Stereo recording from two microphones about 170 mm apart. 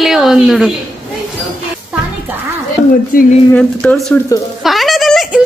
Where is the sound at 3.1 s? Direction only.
55° left (ahead or behind).